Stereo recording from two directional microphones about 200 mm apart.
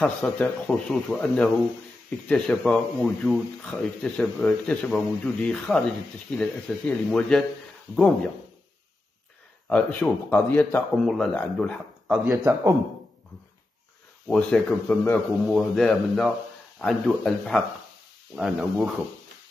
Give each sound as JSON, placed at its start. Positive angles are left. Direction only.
{"t": 0.0, "sound": "speech", "side_deg": 5}
{"t": 9.7, "sound": "speech", "side_deg": 5}
{"t": 14.2, "sound": "speech", "side_deg": 5}